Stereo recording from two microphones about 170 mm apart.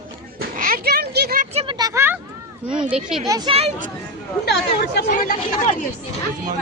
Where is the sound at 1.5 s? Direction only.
30° right (ahead or behind); by 2.2 s 15° right (ahead or behind).